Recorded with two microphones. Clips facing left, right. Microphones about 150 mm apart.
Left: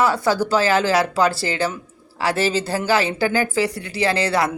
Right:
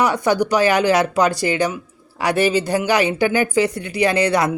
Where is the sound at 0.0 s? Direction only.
20° right (ahead or behind).